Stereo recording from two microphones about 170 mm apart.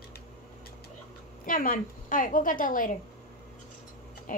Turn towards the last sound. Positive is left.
turn(degrees=50)  # may be behind; listen again after turning